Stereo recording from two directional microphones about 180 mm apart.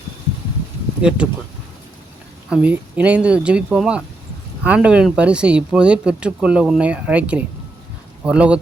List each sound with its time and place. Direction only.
1.0 s speech: 5° right (ahead or behind)
2.5 s speech: 5° right (ahead or behind)